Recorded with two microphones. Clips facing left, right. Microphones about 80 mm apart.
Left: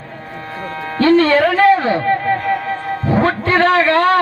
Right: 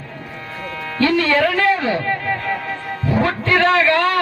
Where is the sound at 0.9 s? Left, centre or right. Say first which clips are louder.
Left 5 dB; left.